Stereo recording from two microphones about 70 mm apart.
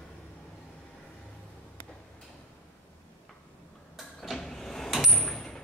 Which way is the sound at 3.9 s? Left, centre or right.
Centre.